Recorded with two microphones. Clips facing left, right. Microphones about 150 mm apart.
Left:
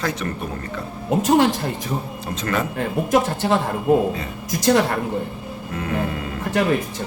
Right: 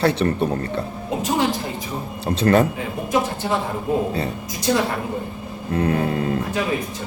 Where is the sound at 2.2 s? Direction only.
30° right (ahead or behind).